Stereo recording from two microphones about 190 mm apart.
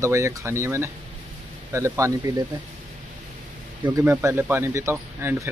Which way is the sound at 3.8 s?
15° right (ahead or behind).